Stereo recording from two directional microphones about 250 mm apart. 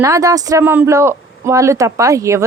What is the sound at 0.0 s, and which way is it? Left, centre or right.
Speech, centre.